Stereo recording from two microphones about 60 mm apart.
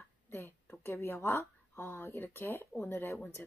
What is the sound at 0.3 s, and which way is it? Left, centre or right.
Speech, left.